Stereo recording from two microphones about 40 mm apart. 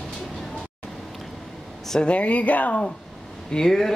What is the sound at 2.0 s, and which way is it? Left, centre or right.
Speech, left.